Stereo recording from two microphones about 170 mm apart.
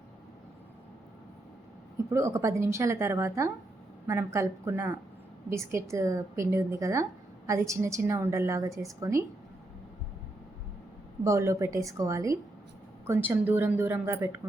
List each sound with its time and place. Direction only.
2.1 s speech: 15° right (ahead or behind)
11.2 s speech: 20° right (ahead or behind)